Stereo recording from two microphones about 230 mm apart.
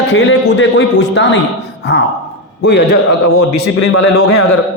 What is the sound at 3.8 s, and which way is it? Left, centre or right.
Speech, left.